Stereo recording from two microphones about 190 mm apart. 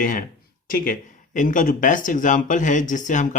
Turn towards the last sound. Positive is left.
turn(degrees=40)  # may be behind; listen again after turning